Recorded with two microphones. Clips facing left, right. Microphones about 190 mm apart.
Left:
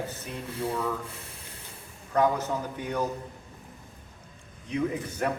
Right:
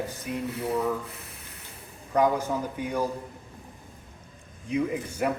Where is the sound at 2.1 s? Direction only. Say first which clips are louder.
Right 1 dB; 10° right (ahead or behind).